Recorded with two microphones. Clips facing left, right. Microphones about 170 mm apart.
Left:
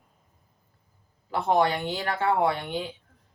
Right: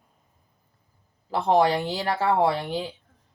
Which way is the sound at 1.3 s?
35° right (ahead or behind).